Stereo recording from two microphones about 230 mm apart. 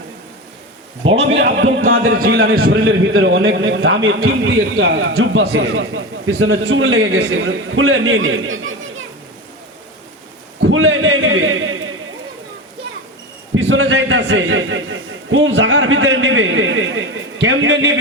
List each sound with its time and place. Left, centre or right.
1.0 s a man's voice: right
1.4 s a man's voice: right
2.0 s a man's voice: right
2.3 s a man's voice: right
10.6 s a man's voice: right
13.5 s a man's voice: right